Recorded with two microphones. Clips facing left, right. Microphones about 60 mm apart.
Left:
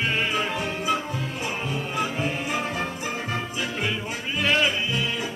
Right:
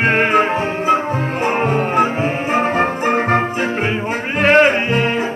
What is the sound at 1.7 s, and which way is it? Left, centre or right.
Music, right.